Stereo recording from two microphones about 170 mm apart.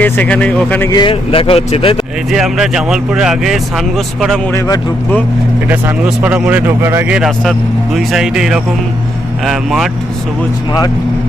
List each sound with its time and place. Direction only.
0.0 s a man's voice: 10° left (ahead or behind)
0.9 s speech: 25° left (ahead or behind)
2.3 s speech: 5° right (ahead or behind)
4.5 s speech: 20° left (ahead or behind)
5.6 s speech: 10° right (ahead or behind)
7.2 s speech: centre (ahead or behind)